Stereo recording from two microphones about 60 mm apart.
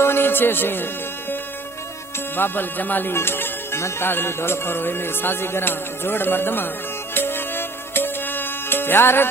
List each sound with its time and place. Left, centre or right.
0.0 s music: left
2.3 s speech: left
7.1 s music: left